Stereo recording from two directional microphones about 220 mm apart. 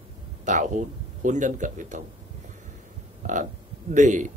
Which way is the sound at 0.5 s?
35° right (ahead or behind).